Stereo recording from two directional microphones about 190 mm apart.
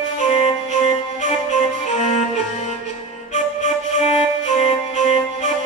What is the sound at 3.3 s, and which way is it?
Music, 40° left (ahead or behind).